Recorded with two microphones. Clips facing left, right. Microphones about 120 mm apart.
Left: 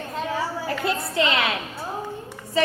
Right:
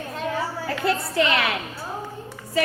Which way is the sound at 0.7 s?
20° left (ahead or behind).